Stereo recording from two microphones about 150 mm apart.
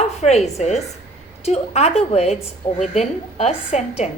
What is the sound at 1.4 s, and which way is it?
A woman's voice, 45° left (ahead or behind).